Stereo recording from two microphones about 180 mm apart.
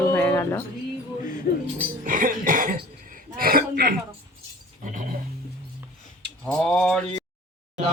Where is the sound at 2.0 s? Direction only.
50° right (ahead or behind).